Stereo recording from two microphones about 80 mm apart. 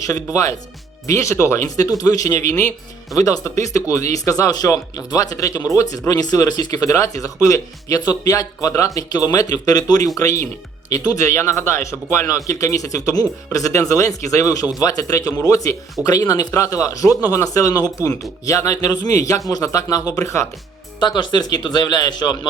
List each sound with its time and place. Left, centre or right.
1.0 s speech: left
1.6 s speech: left
10.2 s speech: left
21.0 s speech: left